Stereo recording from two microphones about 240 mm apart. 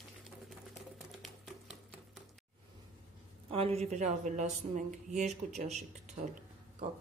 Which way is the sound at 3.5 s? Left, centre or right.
Right.